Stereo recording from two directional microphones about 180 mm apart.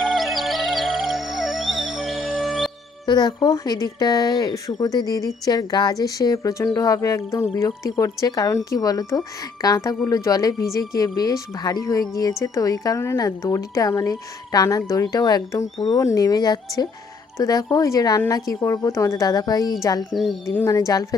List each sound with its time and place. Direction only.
0.0 s music: centre (ahead or behind)
3.1 s speech: 25° left (ahead or behind)